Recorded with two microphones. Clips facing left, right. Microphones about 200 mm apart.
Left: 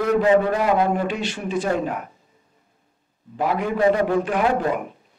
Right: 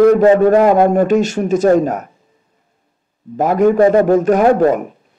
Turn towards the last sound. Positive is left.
turn(degrees=-45)  # may be behind; listen again after turning